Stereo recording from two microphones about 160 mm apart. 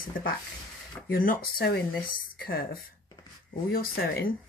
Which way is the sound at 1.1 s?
65° left (ahead or behind).